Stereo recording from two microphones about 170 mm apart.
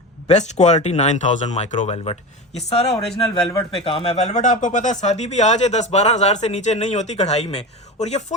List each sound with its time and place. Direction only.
0.3 s speech: 40° left (ahead or behind)